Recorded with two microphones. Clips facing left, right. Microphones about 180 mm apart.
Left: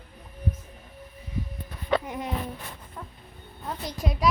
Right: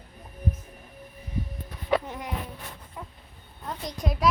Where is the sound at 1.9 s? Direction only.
5° right (ahead or behind).